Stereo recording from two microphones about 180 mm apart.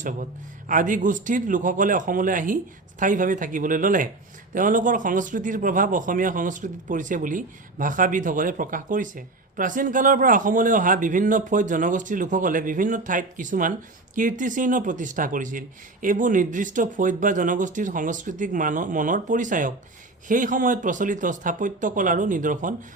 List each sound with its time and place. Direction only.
0.7 s a man's voice: 45° right (ahead or behind)